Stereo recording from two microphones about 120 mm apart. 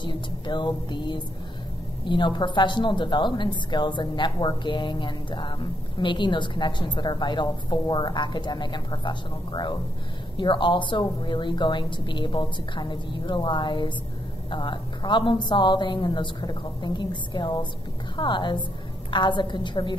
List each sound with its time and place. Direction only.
0.0 s a woman's voice: 40° left (ahead or behind)